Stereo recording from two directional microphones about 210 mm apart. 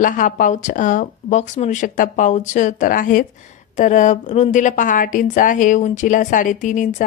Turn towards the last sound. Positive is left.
turn(degrees=40)  # may be behind; listen again after turning